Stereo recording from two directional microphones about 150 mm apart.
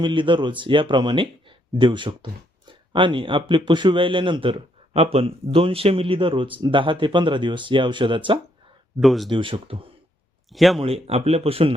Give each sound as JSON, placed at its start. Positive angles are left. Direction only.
{"t": 0.0, "sound": "speech", "side_deg": -30}
{"t": 9.0, "sound": "speech", "side_deg": 0}
{"t": 9.3, "sound": "speech", "side_deg": -35}
{"t": 10.5, "sound": "speech", "side_deg": 0}
{"t": 10.8, "sound": "speech", "side_deg": -40}